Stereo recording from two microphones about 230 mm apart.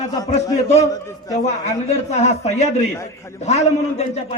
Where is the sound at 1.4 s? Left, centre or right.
Left.